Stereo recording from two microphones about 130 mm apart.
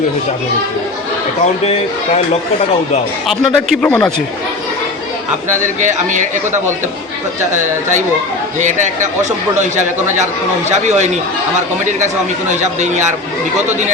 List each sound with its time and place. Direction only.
3.2 s speech: centre (ahead or behind)
5.6 s speech: 70° right (ahead or behind)
7.5 s speech: 70° right (ahead or behind)
10.7 s speech: 65° right (ahead or behind)